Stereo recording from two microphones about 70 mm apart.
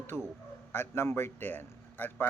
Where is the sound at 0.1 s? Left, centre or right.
Left.